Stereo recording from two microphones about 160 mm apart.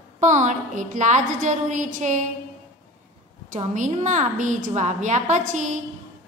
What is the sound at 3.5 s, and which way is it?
A woman's voice, 50° right (ahead or behind).